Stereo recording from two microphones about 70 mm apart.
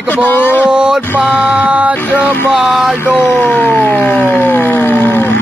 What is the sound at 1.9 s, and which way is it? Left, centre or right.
Mantra, left.